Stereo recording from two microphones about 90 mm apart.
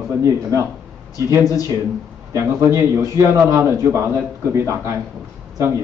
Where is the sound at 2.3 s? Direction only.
35° right (ahead or behind).